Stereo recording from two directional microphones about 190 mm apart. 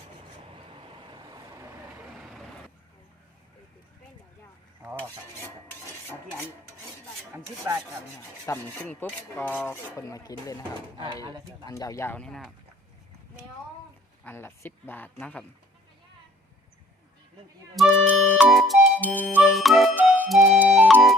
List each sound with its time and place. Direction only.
0.7 s vehicle: 25° right (ahead or behind)
2.0 s vehicle: centre (ahead or behind)
7.3 s rub: 15° right (ahead or behind)
8.4 s speech: 10° left (ahead or behind)
10.8 s speech: 25° right (ahead or behind)
11.6 s speech: 20° left (ahead or behind); by 12.5 s 5° left (ahead or behind)
14.3 s speech: 10° left (ahead or behind)
17.7 s music: 5° right (ahead or behind)
19.3 s music: centre (ahead or behind)